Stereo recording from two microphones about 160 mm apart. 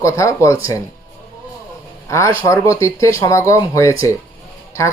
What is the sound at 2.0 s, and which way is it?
A man's voice, 20° left (ahead or behind).